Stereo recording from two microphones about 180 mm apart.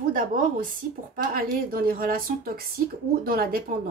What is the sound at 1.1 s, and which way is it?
A woman's voice, 50° right (ahead or behind).